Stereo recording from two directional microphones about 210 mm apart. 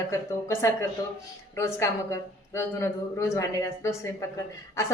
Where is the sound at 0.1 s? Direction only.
15° left (ahead or behind).